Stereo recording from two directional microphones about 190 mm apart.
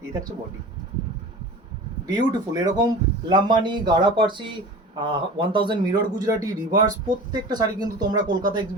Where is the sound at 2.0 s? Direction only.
20° right (ahead or behind).